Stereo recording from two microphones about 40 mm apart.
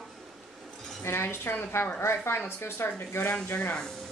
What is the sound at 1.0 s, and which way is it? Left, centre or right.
Speech, left.